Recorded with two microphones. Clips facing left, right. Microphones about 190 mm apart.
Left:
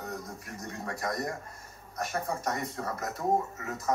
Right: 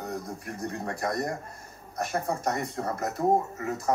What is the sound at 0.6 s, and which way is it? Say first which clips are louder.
Speech: right 4 dB; 30° right (ahead or behind).